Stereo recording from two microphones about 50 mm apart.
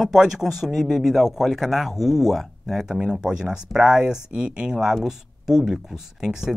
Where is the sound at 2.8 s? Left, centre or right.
Centre.